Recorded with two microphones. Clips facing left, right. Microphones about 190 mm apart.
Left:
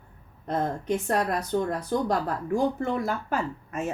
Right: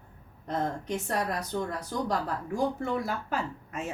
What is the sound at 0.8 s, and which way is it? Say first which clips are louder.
Speech: left 5 dB; 60° left (ahead or behind).